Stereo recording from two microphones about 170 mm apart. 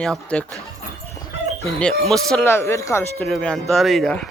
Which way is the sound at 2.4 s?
15° left (ahead or behind).